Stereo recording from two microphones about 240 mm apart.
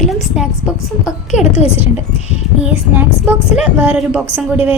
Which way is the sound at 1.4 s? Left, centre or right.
Left.